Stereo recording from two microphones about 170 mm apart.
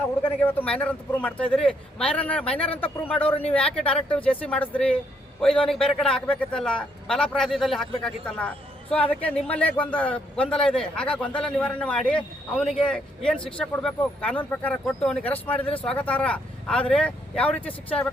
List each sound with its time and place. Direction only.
0.2 s a man's voice: 10° left (ahead or behind)